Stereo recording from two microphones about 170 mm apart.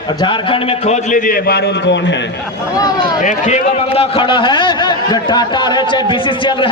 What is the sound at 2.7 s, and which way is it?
Speech, 25° left (ahead or behind).